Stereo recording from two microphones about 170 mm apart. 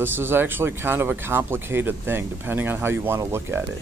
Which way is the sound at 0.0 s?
10° right (ahead or behind).